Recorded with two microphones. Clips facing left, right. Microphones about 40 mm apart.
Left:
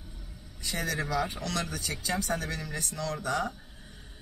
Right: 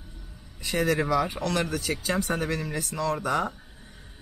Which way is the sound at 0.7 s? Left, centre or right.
Right.